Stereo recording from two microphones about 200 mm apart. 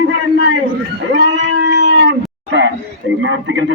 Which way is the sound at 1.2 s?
60° right (ahead or behind).